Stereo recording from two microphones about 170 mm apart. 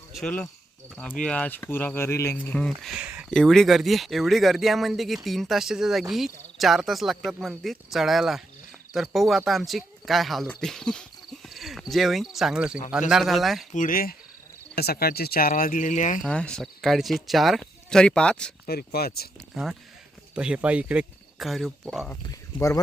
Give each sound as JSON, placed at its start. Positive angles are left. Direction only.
{"t": 0.1, "sound": "speech", "side_deg": 5}
{"t": 13.7, "sound": "speech", "side_deg": 55}
{"t": 16.2, "sound": "speech", "side_deg": 5}
{"t": 18.6, "sound": "speech", "side_deg": 65}
{"t": 20.3, "sound": "speech", "side_deg": -5}
{"t": 22.1, "sound": "speech", "side_deg": 15}